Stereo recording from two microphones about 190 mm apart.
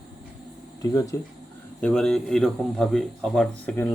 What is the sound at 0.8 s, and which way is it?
Speech, 20° left (ahead or behind).